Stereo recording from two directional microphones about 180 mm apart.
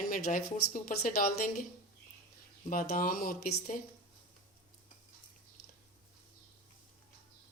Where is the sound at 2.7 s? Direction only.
50° left (ahead or behind).